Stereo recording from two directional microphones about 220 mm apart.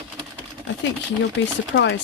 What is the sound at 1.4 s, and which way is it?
Speech, 55° left (ahead or behind).